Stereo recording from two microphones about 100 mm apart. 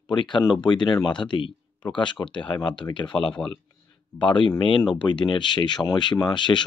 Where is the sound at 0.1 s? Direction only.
50° left (ahead or behind).